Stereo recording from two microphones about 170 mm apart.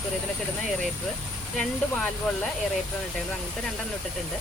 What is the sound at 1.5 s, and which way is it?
Speech, centre (ahead or behind).